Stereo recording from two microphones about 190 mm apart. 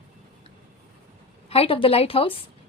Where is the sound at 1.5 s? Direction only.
30° left (ahead or behind).